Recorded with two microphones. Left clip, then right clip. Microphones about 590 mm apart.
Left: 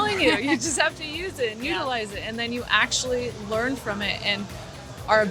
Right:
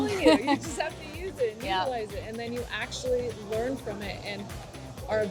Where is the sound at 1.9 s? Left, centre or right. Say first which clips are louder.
Left 4 dB; left.